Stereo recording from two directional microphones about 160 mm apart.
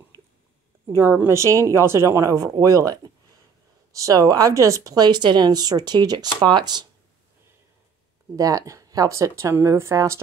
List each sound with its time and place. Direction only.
0.9 s speech: 15° right (ahead or behind)
8.4 s speech: 20° right (ahead or behind)